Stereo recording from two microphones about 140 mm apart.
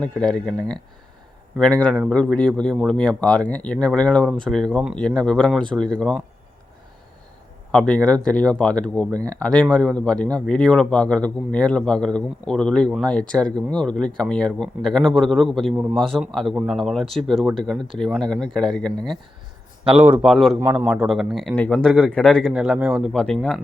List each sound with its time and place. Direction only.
0.0 s a man's voice: 5° left (ahead or behind)
1.5 s a man's voice: 5° left (ahead or behind)
7.7 s a man's voice: 5° left (ahead or behind)
19.8 s speech: 10° right (ahead or behind)
20.2 s speech: centre (ahead or behind)
20.6 s speech: 15° right (ahead or behind)
20.8 s speech: 5° right (ahead or behind)